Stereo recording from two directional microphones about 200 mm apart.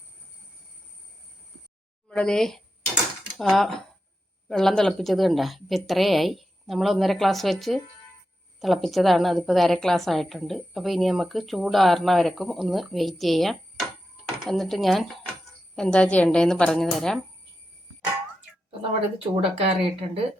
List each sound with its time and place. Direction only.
2.0 s a sound: 5° left (ahead or behind)
4.4 s a woman's voice: centre (ahead or behind)
19.5 s speech: 30° right (ahead or behind)